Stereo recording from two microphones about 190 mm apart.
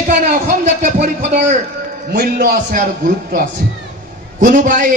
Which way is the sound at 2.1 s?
50° right (ahead or behind).